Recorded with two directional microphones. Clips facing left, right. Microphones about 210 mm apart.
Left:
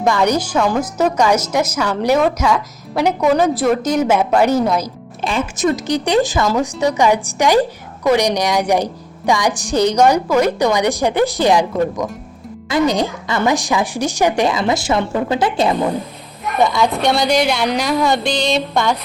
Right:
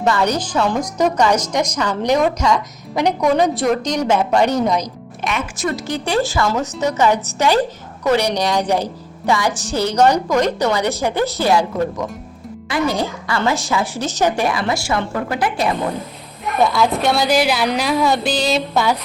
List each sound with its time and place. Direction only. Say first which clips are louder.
0.0 s a woman's voice: left 2 dB; 10° left (ahead or behind)
5.2 s a woman's voice: left 5 dB; 30° left (ahead or behind)
12.6 s a woman's voice: left 4 dB; 20° left (ahead or behind)
16.6 s a woman's voice: left 1 dB; centre (ahead or behind)